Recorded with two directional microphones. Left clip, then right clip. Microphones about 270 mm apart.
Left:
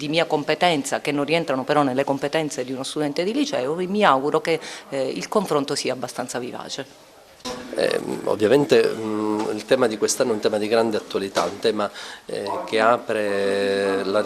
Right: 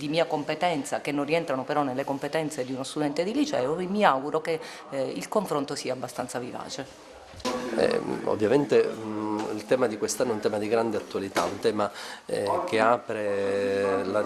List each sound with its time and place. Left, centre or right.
0.0 s speech: left
7.8 s speech: left